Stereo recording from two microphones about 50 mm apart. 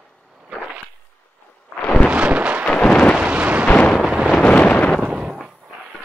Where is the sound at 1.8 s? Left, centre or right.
Left.